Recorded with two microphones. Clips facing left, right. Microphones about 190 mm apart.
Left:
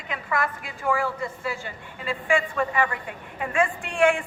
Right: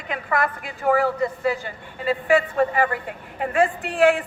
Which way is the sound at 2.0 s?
35° right (ahead or behind).